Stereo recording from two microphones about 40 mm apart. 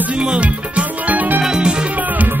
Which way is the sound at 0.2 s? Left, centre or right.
Right.